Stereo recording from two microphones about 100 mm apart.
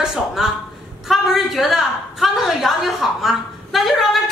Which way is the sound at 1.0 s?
Centre (ahead or behind).